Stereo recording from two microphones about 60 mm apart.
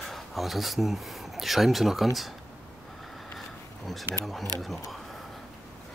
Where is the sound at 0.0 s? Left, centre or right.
Centre.